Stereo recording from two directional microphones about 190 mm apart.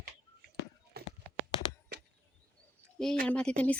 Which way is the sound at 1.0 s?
55° right (ahead or behind).